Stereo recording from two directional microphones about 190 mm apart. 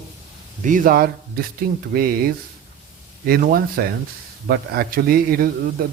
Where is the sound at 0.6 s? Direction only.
45° right (ahead or behind).